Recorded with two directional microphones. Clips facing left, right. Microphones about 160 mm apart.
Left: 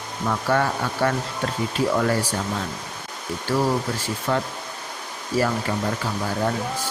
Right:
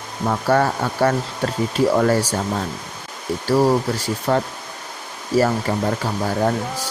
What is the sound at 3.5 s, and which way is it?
Speech, 40° right (ahead or behind).